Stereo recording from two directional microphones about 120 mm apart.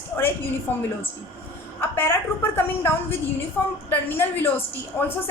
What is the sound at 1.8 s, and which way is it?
A woman's voice, 20° left (ahead or behind).